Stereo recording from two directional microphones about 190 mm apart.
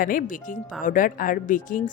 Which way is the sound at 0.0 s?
45° left (ahead or behind).